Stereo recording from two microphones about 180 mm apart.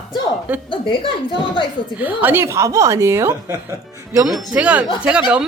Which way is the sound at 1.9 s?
10° right (ahead or behind).